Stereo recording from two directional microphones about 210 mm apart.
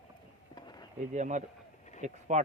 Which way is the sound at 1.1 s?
35° right (ahead or behind).